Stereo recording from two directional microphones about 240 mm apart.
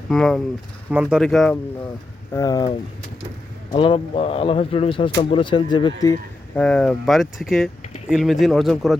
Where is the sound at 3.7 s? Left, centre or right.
Left.